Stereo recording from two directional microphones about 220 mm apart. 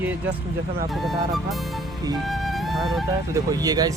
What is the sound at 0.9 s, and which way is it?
Speech, centre (ahead or behind).